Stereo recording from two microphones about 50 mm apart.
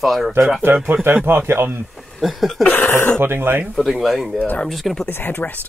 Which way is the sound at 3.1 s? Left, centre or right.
Right.